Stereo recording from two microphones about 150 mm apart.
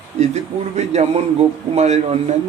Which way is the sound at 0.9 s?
45° right (ahead or behind).